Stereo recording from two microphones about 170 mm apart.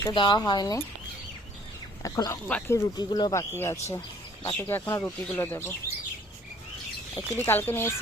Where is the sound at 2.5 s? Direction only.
5° left (ahead or behind).